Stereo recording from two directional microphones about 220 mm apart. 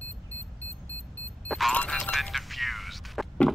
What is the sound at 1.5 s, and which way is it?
Music, 5° left (ahead or behind).